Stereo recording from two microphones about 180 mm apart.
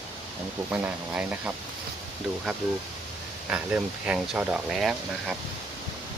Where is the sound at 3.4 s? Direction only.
5° right (ahead or behind).